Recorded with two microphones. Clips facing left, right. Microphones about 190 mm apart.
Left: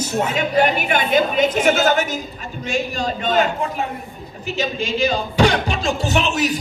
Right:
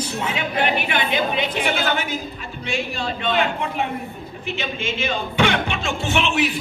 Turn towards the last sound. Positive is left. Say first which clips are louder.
# left 1 dB
turn(degrees=40)  # may be behind; listen again after turning